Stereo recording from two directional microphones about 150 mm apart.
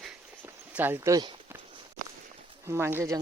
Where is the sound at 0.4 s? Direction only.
15° right (ahead or behind).